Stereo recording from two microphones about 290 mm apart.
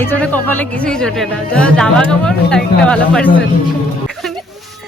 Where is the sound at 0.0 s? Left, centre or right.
Centre.